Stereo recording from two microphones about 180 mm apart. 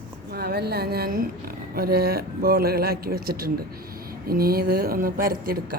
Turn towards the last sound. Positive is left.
turn(degrees=-55)  # may be behind; listen again after turning